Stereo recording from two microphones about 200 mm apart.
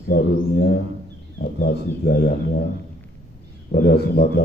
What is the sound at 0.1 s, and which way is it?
Speech, 50° left (ahead or behind).